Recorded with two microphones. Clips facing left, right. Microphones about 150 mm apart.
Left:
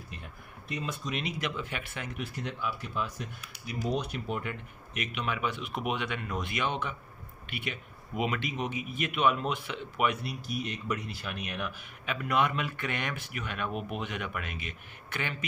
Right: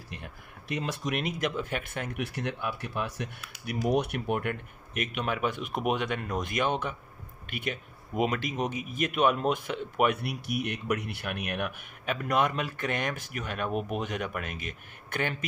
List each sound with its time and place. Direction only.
0.1 s a sound: 80° right
1.2 s speech: 45° right (ahead or behind)
10.2 s speech: 70° right (ahead or behind)
12.2 s speech: 40° right (ahead or behind)